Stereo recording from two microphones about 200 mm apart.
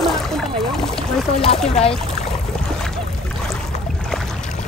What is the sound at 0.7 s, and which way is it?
Speech, centre (ahead or behind).